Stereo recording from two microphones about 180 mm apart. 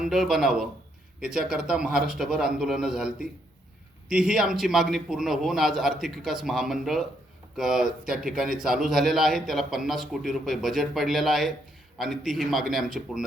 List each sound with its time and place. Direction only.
0.0 s a man's voice: centre (ahead or behind)
4.1 s a man's voice: 5° right (ahead or behind)